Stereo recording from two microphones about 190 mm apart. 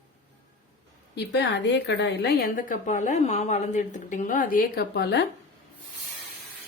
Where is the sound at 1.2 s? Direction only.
65° left (ahead or behind).